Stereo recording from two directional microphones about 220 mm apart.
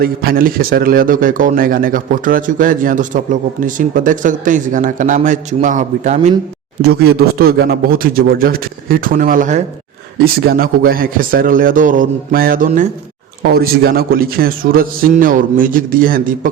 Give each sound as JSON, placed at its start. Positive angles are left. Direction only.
{"t": 0.0, "sound": "a man's voice", "side_deg": -45}
{"t": 6.8, "sound": "a man's voice", "side_deg": -45}